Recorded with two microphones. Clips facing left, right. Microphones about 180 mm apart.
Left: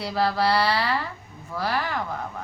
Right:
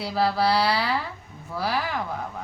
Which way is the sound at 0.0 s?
5° right (ahead or behind).